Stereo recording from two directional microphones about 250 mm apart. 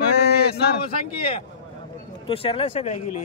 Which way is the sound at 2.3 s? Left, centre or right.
Left.